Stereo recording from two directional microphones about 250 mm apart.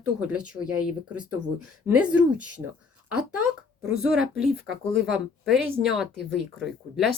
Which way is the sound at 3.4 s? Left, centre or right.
Right.